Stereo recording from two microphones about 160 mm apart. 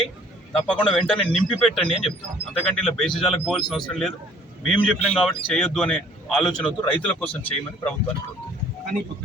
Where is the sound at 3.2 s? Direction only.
Centre (ahead or behind).